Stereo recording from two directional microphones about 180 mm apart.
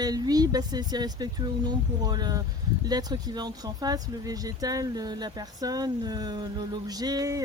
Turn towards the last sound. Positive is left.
turn(degrees=-20)  # may be behind; listen again after turning